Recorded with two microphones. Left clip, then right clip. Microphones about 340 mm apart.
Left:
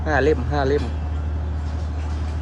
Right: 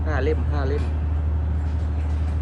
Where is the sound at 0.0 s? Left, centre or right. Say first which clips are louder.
Left 7 dB; left.